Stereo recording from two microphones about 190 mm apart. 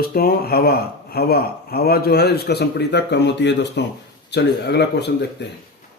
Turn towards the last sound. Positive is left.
turn(degrees=60)  # may be behind; listen again after turning